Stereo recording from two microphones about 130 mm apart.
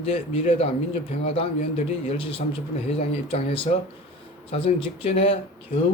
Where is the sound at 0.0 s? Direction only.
50° left (ahead or behind).